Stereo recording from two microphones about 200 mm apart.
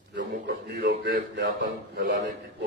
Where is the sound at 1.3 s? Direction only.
60° right (ahead or behind).